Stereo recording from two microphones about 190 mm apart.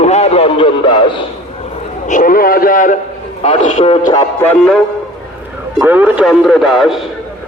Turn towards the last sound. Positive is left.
turn(degrees=0)  # may be behind; listen again after turning